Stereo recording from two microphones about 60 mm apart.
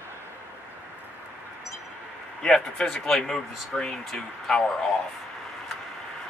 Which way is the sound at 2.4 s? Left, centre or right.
Centre.